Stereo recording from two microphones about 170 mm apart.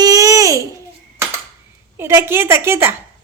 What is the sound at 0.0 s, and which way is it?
Babbling, 20° right (ahead or behind).